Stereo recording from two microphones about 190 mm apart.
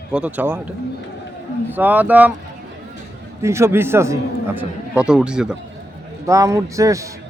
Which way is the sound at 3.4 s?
15° right (ahead or behind).